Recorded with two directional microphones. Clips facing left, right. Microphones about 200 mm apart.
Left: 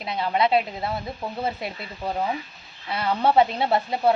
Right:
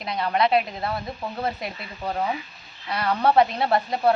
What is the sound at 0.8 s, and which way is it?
Speech, 5° left (ahead or behind).